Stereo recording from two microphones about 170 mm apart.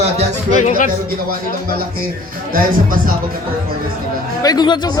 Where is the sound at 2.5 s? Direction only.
55° right (ahead or behind).